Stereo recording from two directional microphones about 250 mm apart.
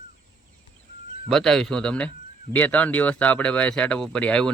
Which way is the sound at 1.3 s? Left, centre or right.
Centre.